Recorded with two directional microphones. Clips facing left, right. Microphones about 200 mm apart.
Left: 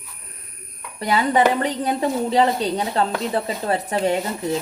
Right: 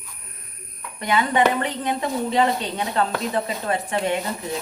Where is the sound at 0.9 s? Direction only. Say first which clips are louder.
Left 2 dB; 35° left (ahead or behind).